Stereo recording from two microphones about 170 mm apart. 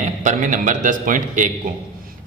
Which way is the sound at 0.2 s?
45° right (ahead or behind).